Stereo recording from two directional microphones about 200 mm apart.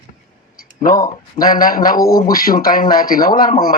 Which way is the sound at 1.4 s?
45° left (ahead or behind).